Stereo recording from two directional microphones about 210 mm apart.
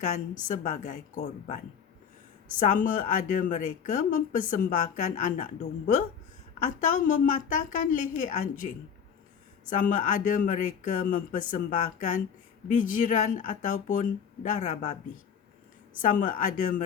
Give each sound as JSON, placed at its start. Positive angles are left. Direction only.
{"t": 0.3, "sound": "speech", "side_deg": 40}
{"t": 2.6, "sound": "speech", "side_deg": 40}
{"t": 16.0, "sound": "speech", "side_deg": 40}